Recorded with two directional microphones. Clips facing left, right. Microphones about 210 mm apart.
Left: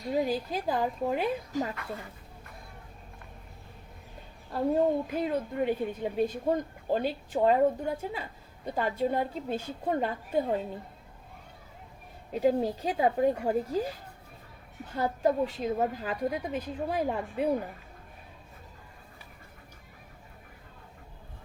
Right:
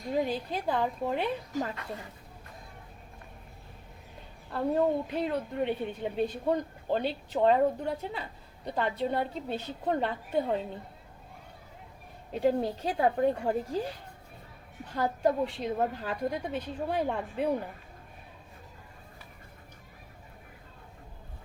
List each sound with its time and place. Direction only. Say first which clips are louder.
0.1 s a woman's voice: left 1 dB; 5° left (ahead or behind)
1.7 s a woman's voice: left 1 dB; 25° right (ahead or behind)
4.5 s a woman's voice: left 1 dB; 5° left (ahead or behind)
12.3 s a woman's voice: left 1 dB; 5° left (ahead or behind)
15.2 s a woman's voice: left 1 dB; 5° left (ahead or behind)